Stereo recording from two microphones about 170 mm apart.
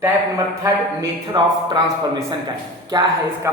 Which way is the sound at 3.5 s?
15° right (ahead or behind).